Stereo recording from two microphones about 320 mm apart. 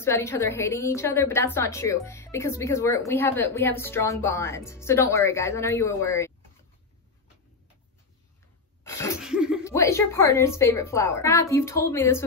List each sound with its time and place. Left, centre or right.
0.0 s a woman's voice: centre
8.8 s cough: centre
9.2 s laughter: centre
9.7 s a woman's voice: centre